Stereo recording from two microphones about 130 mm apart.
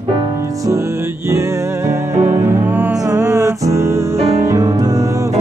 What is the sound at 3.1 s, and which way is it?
Music, 20° right (ahead or behind).